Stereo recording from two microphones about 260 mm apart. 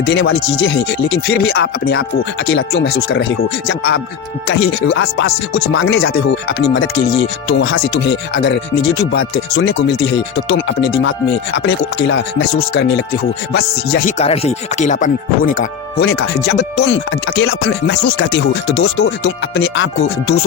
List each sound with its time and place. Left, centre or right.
0.0 s speech: left
14.2 s music: left
16.0 s speech: left